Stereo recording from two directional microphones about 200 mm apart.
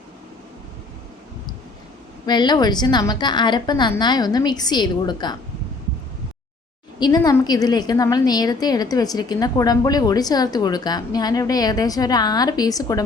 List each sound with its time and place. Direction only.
2.2 s a woman's voice: 20° left (ahead or behind)
7.0 s a woman's voice: 20° left (ahead or behind)